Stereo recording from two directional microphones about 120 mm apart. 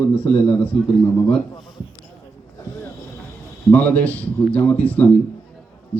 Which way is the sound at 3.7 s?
10° left (ahead or behind).